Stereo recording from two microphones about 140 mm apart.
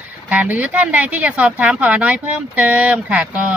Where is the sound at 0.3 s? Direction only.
10° right (ahead or behind).